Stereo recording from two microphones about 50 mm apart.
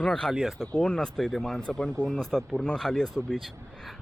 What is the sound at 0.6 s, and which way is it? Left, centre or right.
Speech, centre.